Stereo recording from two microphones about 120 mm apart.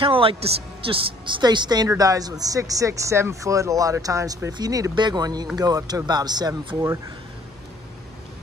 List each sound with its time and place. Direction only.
0.0 s a woman's voice: 45° right (ahead or behind)